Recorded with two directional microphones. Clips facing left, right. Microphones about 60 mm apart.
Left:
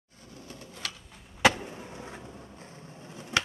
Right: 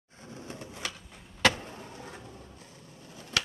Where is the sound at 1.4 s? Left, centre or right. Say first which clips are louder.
Left 3 dB; centre.